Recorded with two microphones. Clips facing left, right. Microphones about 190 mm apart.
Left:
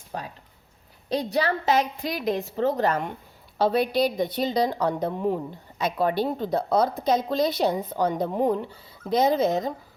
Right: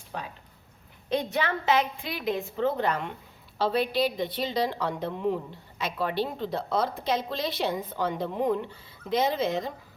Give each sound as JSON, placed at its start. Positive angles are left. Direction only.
{"t": 0.1, "sound": "a woman's voice", "side_deg": 40}